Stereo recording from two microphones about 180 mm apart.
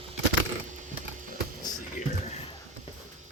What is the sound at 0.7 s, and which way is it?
Mechanisms, 45° right (ahead or behind).